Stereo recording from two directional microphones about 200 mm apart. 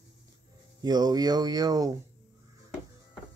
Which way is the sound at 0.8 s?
20° right (ahead or behind).